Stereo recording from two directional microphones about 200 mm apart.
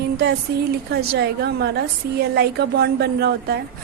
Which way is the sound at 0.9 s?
55° right (ahead or behind).